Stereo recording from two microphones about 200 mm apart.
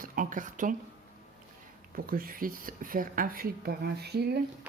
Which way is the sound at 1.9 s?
45° right (ahead or behind).